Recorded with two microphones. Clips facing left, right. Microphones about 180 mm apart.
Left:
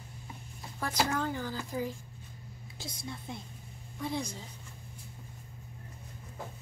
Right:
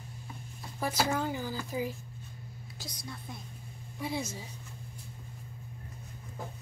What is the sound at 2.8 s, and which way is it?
Speech, 25° left (ahead or behind).